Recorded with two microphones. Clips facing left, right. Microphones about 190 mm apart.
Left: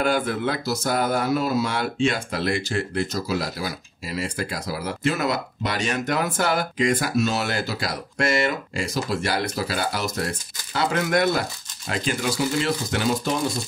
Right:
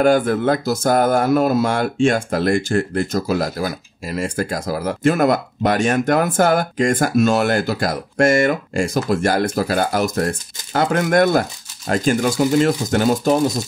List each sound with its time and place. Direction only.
0.0 s speech: 50° right (ahead or behind)